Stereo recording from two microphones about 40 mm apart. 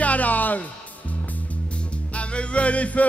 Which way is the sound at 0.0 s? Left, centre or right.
Left.